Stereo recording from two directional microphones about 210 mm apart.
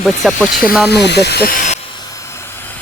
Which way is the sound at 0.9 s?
50° left (ahead or behind).